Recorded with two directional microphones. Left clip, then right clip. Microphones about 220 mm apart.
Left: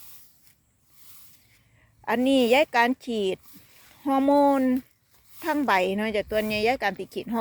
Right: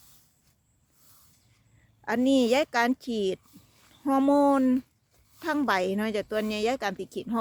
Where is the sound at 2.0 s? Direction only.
5° right (ahead or behind).